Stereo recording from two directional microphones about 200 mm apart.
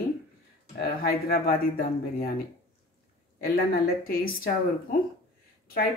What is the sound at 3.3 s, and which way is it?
Speech, 50° left (ahead or behind).